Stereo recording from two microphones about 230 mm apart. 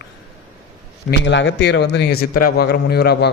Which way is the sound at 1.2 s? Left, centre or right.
Left.